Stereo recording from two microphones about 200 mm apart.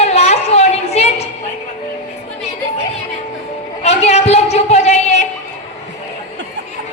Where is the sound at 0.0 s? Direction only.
30° left (ahead or behind).